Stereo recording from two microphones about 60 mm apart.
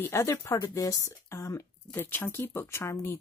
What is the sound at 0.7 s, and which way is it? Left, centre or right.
Speech, left.